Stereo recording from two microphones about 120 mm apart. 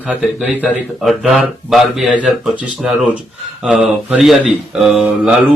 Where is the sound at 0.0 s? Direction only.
5° right (ahead or behind).